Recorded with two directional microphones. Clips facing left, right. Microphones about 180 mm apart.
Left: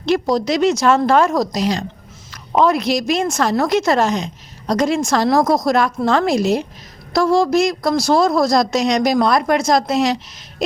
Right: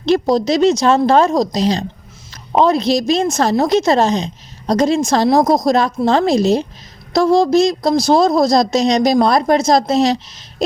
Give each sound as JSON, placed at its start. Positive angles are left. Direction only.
{"t": 0.1, "sound": "a woman's voice", "side_deg": -25}